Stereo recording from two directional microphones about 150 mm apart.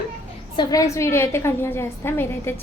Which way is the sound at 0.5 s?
25° left (ahead or behind).